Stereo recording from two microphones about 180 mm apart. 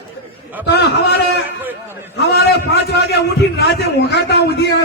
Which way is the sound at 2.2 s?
65° left (ahead or behind).